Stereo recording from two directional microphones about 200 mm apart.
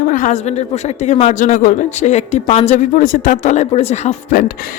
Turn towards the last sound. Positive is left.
turn(degrees=35)  # may be behind; listen again after turning